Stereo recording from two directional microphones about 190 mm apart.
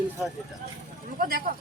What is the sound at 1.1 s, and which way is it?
Speech, 50° right (ahead or behind).